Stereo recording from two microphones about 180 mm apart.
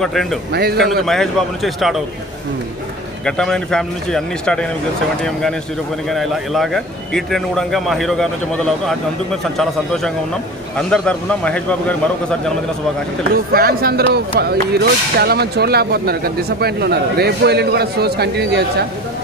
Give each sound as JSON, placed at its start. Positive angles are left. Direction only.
{"t": 0.0, "sound": "a man's voice", "side_deg": 0}
{"t": 0.5, "sound": "speech", "side_deg": -60}
{"t": 1.0, "sound": "a man's voice", "side_deg": 0}
{"t": 3.3, "sound": "a man's voice", "side_deg": 5}
{"t": 6.0, "sound": "a man's voice", "side_deg": 0}
{"t": 13.5, "sound": "speech", "side_deg": -55}